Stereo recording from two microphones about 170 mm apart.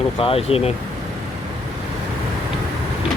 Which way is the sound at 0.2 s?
35° left (ahead or behind).